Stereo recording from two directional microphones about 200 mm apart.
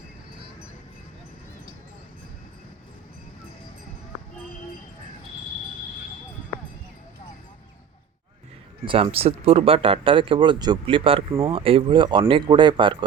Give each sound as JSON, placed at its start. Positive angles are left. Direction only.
{"t": 8.8, "sound": "speech", "side_deg": -25}